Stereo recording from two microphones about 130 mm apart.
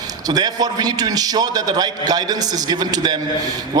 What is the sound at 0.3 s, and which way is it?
A man's voice, 30° right (ahead or behind).